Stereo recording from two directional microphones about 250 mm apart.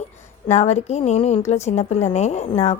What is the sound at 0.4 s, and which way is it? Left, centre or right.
A woman's voice, left.